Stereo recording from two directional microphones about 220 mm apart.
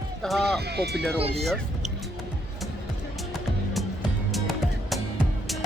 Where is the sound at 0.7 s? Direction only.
50° right (ahead or behind).